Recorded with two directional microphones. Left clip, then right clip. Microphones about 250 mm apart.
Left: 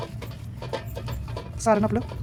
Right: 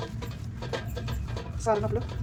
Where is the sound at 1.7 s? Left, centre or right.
Left.